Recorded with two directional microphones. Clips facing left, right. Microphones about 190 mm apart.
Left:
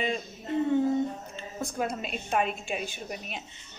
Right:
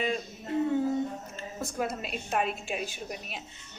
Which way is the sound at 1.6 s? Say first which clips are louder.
Left 1 dB; 5° right (ahead or behind).